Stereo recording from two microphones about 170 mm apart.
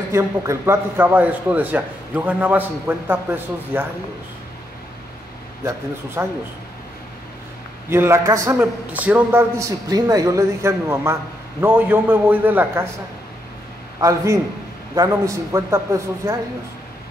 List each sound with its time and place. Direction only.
0.1 s a man's voice: 15° right (ahead or behind)
6.2 s a man's voice: 15° right (ahead or behind)
7.9 s a man's voice: 15° right (ahead or behind)
13.9 s a man's voice: 20° right (ahead or behind)